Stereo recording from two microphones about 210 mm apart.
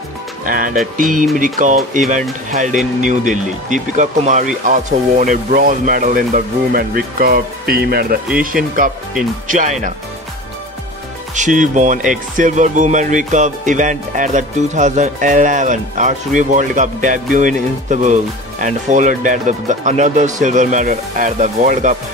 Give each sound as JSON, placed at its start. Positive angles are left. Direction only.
{"t": 0.5, "sound": "speech", "side_deg": -40}
{"t": 9.5, "sound": "speech", "side_deg": -35}
{"t": 11.3, "sound": "speech", "side_deg": -35}